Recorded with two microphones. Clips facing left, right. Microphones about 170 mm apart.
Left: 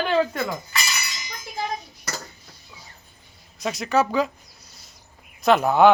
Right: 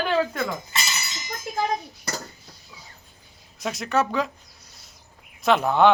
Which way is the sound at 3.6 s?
Centre (ahead or behind).